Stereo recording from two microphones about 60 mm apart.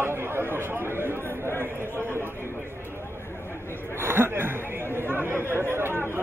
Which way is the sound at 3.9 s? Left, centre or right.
Right.